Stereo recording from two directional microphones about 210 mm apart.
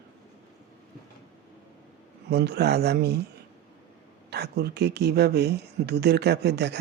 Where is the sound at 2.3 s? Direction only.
50° right (ahead or behind).